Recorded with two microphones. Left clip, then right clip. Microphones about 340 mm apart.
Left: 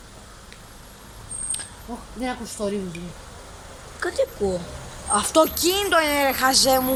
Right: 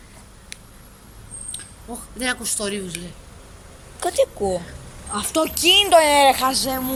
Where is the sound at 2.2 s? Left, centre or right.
Right.